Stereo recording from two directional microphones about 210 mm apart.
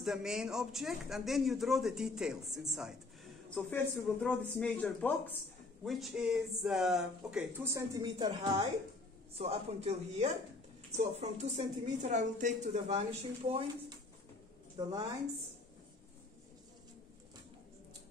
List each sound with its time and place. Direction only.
0.0 s a woman's voice: centre (ahead or behind); by 15.0 s 15° right (ahead or behind)